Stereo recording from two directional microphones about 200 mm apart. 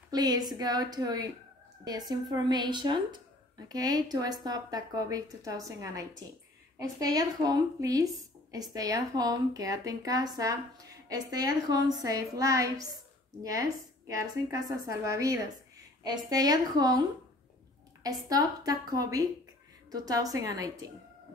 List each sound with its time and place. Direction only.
0.1 s speech: 20° right (ahead or behind)
18.0 s speech: 20° right (ahead or behind)